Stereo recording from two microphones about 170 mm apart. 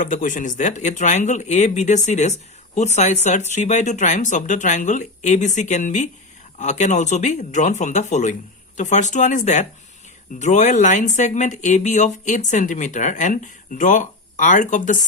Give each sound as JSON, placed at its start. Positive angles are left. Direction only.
{"t": 0.0, "sound": "speech", "side_deg": 50}